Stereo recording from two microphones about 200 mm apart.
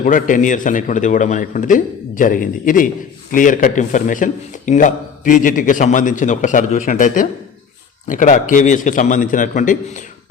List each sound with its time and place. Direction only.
0.0 s a man's voice: 40° left (ahead or behind)